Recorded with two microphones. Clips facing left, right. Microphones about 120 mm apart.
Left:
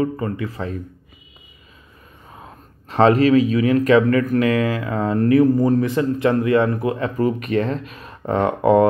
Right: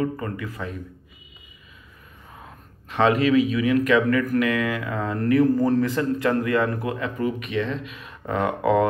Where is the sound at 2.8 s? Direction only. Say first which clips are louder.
Left 5 dB; 35° left (ahead or behind).